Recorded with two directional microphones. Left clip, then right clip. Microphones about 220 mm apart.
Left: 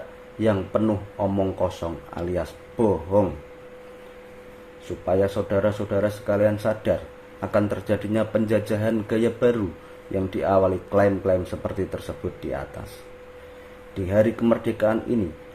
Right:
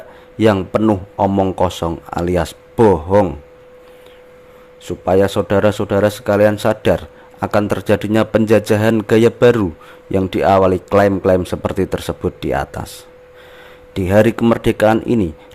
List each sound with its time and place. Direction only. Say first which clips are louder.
0.3 s a man's voice: right 8 dB; 45° right (ahead or behind)
5.0 s a man's voice: right 8 dB; 50° right (ahead or behind)
13.9 s a man's voice: right 8 dB; 50° right (ahead or behind)